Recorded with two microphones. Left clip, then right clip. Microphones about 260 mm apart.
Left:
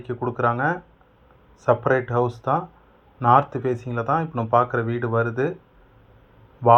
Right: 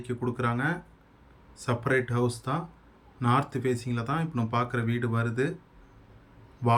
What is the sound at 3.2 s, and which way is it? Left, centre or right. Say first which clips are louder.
Speech: left 10 dB; centre.